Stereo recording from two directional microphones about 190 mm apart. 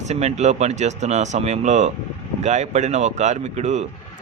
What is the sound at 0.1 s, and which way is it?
A man's voice, 35° right (ahead or behind).